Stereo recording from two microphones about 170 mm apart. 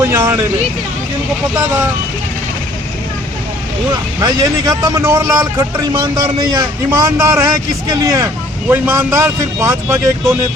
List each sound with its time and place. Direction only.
0.0 s speech: 15° right (ahead or behind)
4.2 s a man's voice: 20° right (ahead or behind)